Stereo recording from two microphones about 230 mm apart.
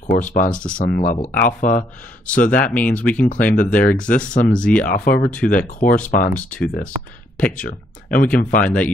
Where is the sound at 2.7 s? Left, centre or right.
Centre.